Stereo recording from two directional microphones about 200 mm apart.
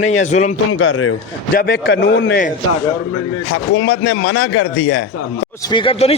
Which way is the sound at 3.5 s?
70° left (ahead or behind).